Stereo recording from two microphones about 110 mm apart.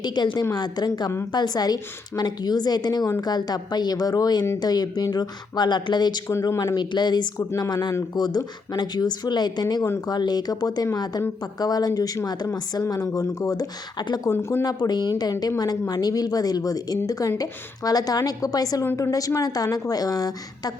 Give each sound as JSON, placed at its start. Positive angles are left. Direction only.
{"t": 0.0, "sound": "speech", "side_deg": 40}
{"t": 6.5, "sound": "speech", "side_deg": 25}
{"t": 6.7, "sound": "speech", "side_deg": 40}
{"t": 7.3, "sound": "speech", "side_deg": 30}
{"t": 14.3, "sound": "speech", "side_deg": 20}
{"t": 14.6, "sound": "speech", "side_deg": 35}